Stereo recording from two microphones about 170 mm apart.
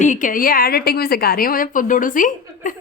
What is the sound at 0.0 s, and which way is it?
A woman's voice, 50° left (ahead or behind).